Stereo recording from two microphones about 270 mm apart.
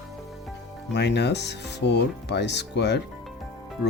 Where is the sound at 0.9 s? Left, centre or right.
Left.